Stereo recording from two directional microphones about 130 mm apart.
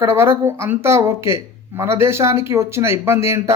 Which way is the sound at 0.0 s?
20° right (ahead or behind).